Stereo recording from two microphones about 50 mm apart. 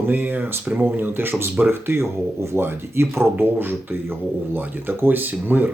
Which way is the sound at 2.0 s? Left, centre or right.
Right.